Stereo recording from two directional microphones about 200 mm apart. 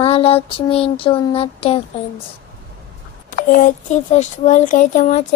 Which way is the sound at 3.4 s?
45° left (ahead or behind).